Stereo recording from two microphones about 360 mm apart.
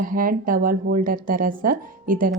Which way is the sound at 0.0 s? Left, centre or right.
Right.